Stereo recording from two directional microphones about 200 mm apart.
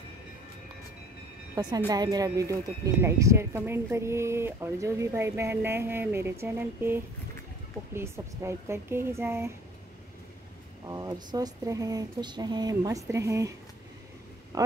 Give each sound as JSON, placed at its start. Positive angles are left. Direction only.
{"t": 1.5, "sound": "speech", "side_deg": -20}
{"t": 10.9, "sound": "speech", "side_deg": -20}